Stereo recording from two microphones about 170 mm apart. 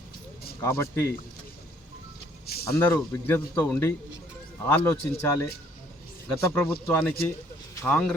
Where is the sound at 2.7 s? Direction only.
15° left (ahead or behind).